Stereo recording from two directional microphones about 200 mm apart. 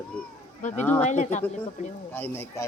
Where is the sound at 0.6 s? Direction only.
40° left (ahead or behind).